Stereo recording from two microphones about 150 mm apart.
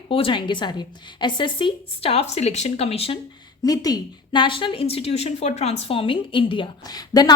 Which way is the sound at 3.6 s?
25° left (ahead or behind).